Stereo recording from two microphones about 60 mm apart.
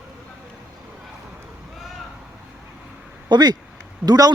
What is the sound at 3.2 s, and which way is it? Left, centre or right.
Speech, right.